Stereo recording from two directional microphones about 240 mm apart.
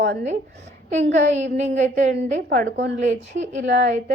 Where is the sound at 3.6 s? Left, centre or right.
Right.